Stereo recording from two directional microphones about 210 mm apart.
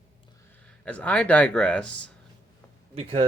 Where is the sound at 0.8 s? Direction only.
5° left (ahead or behind).